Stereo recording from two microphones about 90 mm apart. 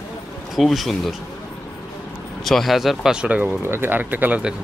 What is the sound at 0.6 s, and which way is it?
Speech, centre (ahead or behind).